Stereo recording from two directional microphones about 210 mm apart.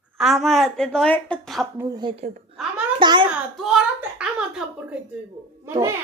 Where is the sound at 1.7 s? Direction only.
15° right (ahead or behind).